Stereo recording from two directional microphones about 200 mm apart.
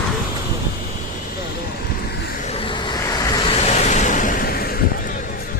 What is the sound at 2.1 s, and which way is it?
Vehicle, 45° left (ahead or behind).